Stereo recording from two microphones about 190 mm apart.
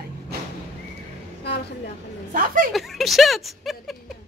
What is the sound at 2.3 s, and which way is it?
Speech, 45° right (ahead or behind).